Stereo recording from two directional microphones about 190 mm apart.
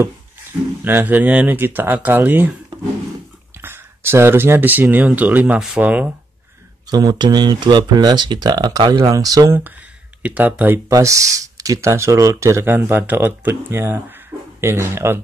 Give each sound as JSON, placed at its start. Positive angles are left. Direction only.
{"t": 0.8, "sound": "speech", "side_deg": -10}
{"t": 3.6, "sound": "speech", "side_deg": -10}
{"t": 6.9, "sound": "speech", "side_deg": -20}